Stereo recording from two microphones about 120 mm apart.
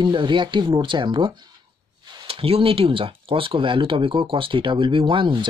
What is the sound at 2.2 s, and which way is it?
Speech, 50° right (ahead or behind).